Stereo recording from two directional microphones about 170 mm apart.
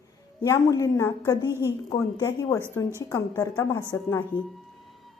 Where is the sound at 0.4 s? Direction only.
20° left (ahead or behind).